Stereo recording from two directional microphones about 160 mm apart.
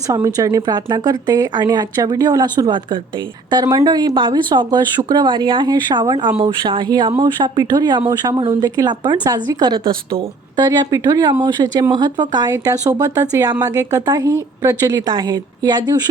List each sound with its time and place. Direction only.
0.1 s speech: 25° right (ahead or behind)